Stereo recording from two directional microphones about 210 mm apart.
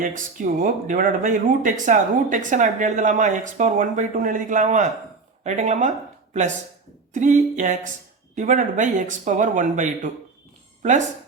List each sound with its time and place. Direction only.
0.0 s speech: 40° right (ahead or behind)
7.1 s speech: 35° right (ahead or behind)